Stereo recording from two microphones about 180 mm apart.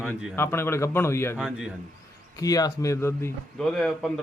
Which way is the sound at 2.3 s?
20° left (ahead or behind).